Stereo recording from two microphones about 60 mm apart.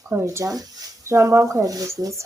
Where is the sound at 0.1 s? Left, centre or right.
Right.